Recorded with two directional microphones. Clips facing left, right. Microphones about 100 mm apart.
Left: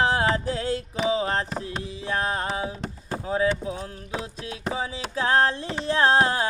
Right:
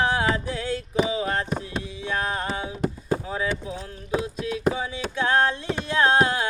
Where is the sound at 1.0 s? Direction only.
30° left (ahead or behind).